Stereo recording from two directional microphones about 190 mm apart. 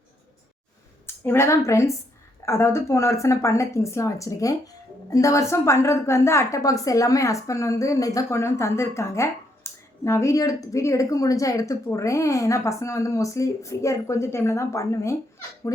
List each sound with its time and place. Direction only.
1.0 s a woman's voice: 10° left (ahead or behind)